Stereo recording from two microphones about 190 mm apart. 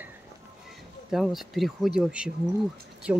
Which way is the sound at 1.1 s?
Centre (ahead or behind).